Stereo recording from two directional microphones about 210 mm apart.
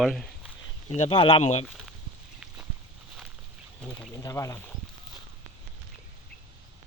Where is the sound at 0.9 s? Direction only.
30° left (ahead or behind).